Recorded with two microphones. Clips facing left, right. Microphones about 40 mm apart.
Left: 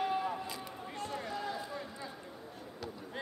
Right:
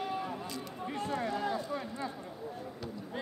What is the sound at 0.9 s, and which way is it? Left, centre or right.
Speech, centre.